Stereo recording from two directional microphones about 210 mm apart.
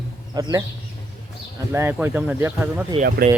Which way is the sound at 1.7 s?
10° right (ahead or behind).